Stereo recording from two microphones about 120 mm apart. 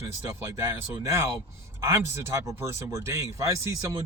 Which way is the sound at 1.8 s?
20° right (ahead or behind).